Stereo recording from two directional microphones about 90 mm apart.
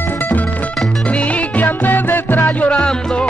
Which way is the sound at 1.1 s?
15° left (ahead or behind).